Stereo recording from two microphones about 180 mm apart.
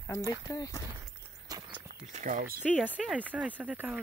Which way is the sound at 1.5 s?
20° right (ahead or behind).